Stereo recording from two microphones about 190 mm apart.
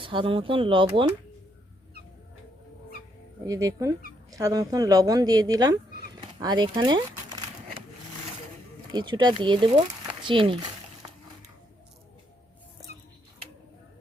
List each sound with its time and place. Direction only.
0.0 s speech: 25° right (ahead or behind)
3.4 s speech: 20° right (ahead or behind)
7.3 s a sound: 20° right (ahead or behind)
8.9 s speech: 25° right (ahead or behind)